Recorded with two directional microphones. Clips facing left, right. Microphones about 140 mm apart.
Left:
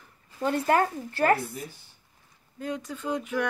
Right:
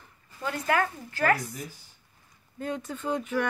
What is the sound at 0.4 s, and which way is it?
Speech, 35° left (ahead or behind).